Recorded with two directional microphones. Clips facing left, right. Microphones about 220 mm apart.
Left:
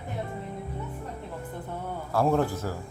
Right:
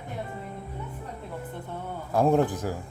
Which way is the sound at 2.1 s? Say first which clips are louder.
Right 2 dB; 15° right (ahead or behind).